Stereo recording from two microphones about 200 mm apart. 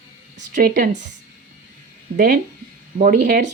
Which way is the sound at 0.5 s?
45° right (ahead or behind).